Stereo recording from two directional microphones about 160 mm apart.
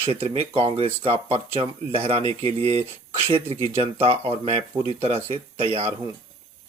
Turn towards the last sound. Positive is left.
turn(degrees=-40)  # may be behind; listen again after turning